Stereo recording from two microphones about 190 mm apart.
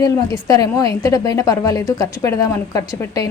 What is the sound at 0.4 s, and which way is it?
A woman's voice, 20° left (ahead or behind).